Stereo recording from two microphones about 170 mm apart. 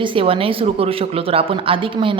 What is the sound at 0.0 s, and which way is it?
A woman's voice, 30° right (ahead or behind).